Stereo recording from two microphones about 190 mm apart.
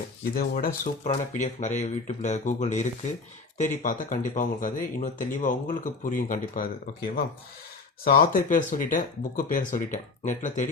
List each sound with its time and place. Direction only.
0.3 s speech: 50° left (ahead or behind)
1.0 s speech: 35° left (ahead or behind)
8.0 s speech: 50° left (ahead or behind)